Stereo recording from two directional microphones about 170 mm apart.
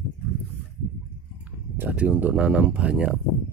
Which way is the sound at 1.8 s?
10° right (ahead or behind).